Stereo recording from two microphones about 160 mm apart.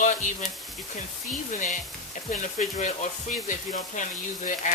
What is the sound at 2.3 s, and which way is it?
Speech, 50° left (ahead or behind).